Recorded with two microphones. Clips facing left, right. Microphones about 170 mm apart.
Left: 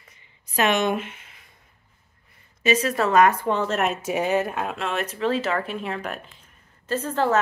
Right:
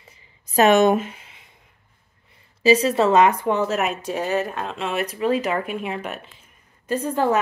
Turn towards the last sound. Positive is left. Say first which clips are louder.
# right 2 dB
turn(degrees=-15)  # may be behind; listen again after turning